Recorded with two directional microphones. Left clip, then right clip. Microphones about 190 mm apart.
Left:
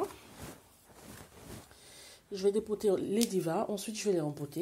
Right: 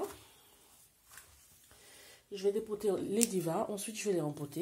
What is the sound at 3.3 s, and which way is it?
Speech, 15° left (ahead or behind).